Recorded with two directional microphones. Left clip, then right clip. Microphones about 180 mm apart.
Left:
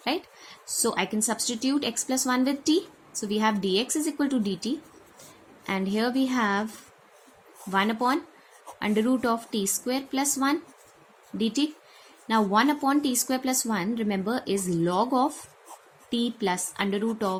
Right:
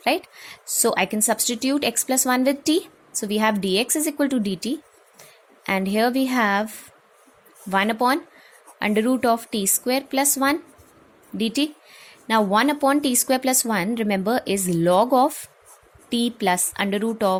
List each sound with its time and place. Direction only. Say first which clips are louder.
0.0 s speech: right 7 dB; 45° right (ahead or behind)
7.7 s speech: right 5 dB; 45° right (ahead or behind)